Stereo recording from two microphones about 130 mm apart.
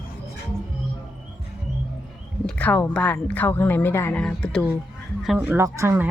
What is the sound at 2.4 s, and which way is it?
Speech, 10° left (ahead or behind).